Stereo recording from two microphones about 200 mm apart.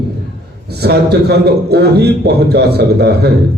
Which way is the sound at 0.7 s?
55° right (ahead or behind).